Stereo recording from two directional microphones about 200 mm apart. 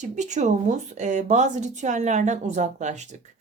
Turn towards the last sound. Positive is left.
turn(degrees=-35)  # may be behind; listen again after turning